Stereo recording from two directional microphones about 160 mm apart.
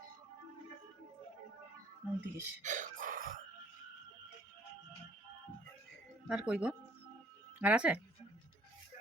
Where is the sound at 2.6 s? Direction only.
55° right (ahead or behind).